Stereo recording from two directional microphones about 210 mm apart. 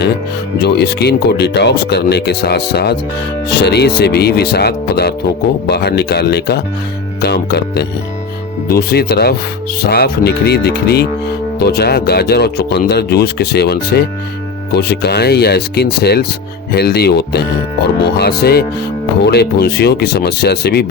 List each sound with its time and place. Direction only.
0.6 s speech: 50° left (ahead or behind)